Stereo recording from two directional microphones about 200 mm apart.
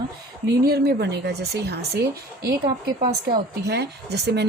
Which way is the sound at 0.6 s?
50° right (ahead or behind).